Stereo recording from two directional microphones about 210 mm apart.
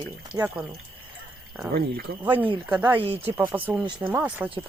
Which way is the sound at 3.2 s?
10° right (ahead or behind).